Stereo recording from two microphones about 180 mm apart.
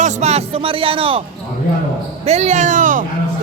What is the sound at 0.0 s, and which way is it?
Speech, 35° right (ahead or behind).